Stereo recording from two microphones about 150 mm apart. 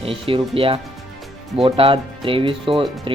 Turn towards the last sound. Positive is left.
turn(degrees=-35)  # may be behind; listen again after turning